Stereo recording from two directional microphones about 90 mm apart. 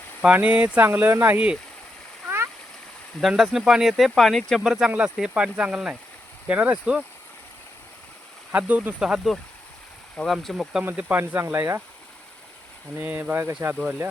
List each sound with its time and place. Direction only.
0.2 s speech: 15° right (ahead or behind)
3.2 s speech: 5° right (ahead or behind)
8.5 s speech: 20° right (ahead or behind); by 10.8 s 5° right (ahead or behind)
10.8 s speech: 20° right (ahead or behind)
13.0 s speech: 20° right (ahead or behind)